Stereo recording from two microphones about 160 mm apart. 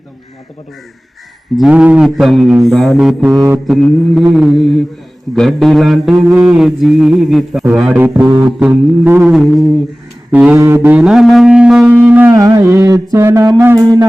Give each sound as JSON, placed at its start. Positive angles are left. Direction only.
{"t": 1.5, "sound": "mantra", "side_deg": -5}
{"t": 3.7, "sound": "mantra", "side_deg": 0}
{"t": 7.6, "sound": "a sound", "side_deg": -5}
{"t": 9.3, "sound": "mantra", "side_deg": 0}
{"t": 10.3, "sound": "a sound", "side_deg": -10}
{"t": 12.3, "sound": "mantra", "side_deg": -20}